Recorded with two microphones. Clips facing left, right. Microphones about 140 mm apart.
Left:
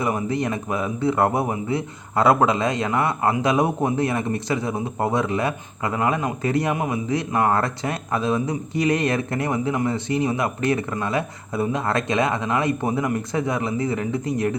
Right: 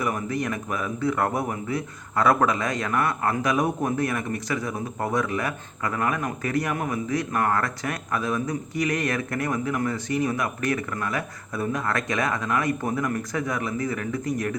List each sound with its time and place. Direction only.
0.0 s a man's voice: 25° left (ahead or behind)